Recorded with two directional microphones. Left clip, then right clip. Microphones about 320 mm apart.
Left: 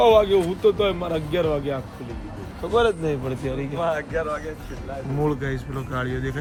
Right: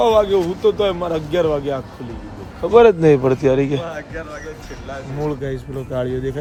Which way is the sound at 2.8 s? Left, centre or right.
Right.